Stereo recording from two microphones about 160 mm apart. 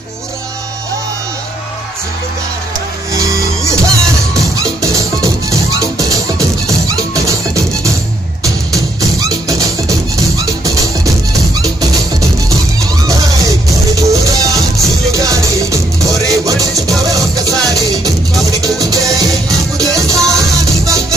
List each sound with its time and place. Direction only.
3.1 s music: 20° right (ahead or behind)